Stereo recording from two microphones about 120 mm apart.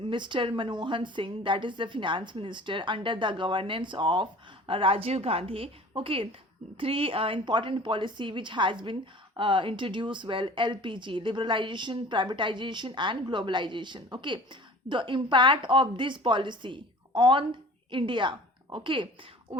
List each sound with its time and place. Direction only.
0.0 s a woman's voice: 45° right (ahead or behind)
19.5 s speech: 65° right (ahead or behind)